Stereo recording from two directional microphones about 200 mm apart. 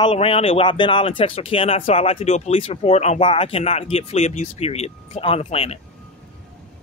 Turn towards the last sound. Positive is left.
turn(degrees=30)  # may be behind; listen again after turning